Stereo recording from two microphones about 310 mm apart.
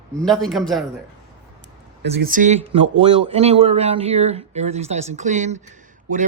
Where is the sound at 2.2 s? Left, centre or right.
Right.